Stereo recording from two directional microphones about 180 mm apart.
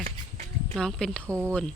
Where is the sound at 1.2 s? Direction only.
15° right (ahead or behind).